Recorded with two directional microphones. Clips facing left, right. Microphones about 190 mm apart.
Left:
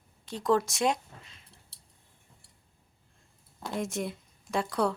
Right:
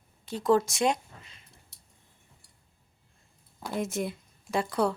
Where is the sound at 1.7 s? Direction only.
35° left (ahead or behind).